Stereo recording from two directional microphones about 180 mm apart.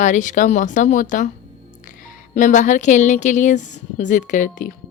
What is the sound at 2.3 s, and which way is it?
A woman's voice, 45° left (ahead or behind).